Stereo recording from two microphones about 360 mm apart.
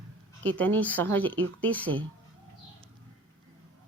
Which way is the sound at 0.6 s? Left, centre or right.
Centre.